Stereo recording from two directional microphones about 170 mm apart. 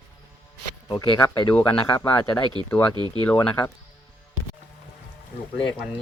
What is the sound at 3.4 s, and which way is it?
Speech, 20° left (ahead or behind).